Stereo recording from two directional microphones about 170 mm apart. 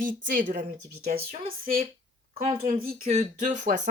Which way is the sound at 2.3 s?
40° right (ahead or behind).